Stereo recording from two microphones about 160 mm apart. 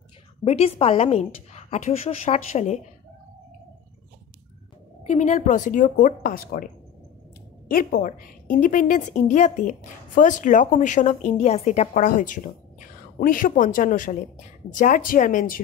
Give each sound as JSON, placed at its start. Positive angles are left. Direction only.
{"t": 0.4, "sound": "a woman's voice", "side_deg": 35}
{"t": 5.0, "sound": "a woman's voice", "side_deg": 45}